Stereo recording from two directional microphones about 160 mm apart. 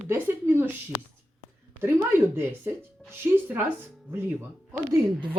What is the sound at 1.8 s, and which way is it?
Speech, 15° right (ahead or behind).